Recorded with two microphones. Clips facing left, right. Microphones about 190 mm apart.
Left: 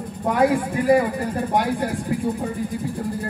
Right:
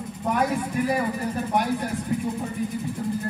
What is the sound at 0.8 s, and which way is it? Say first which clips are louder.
Speech: left 7 dB; 25° left (ahead or behind).